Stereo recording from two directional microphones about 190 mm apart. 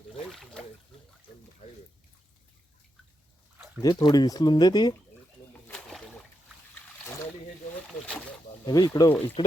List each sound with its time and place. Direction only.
0.3 s a sound: centre (ahead or behind)
3.8 s speech: 20° left (ahead or behind)
5.6 s rowboat: 5° left (ahead or behind)
8.6 s speech: 20° left (ahead or behind)